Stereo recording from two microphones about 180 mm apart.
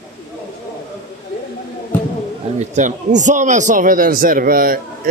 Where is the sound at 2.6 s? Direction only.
40° right (ahead or behind).